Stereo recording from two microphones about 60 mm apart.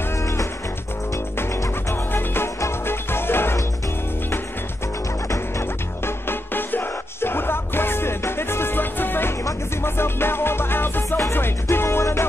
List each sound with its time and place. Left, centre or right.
1.1 s music: left
5.3 s music: left